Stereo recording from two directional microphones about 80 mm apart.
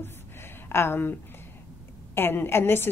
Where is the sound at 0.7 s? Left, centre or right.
Left.